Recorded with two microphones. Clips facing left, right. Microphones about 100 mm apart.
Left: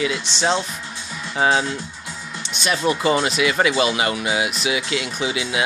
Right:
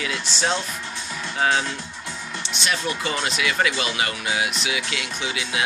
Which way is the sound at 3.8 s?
20° left (ahead or behind).